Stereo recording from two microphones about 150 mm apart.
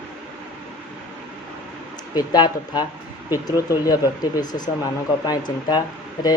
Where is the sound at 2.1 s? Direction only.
25° left (ahead or behind).